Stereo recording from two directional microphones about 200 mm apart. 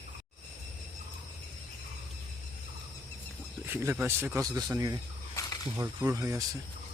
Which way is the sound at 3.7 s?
10° right (ahead or behind).